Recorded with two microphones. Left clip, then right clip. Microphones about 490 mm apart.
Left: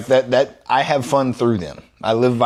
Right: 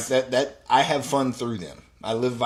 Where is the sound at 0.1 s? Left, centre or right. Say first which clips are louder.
Left 8 dB; left.